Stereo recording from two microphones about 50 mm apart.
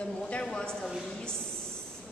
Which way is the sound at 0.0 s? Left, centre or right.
Left.